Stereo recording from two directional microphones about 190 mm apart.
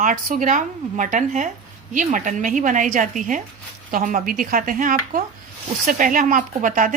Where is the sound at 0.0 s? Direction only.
45° right (ahead or behind).